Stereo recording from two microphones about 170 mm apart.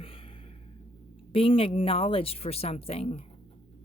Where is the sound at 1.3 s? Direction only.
35° left (ahead or behind).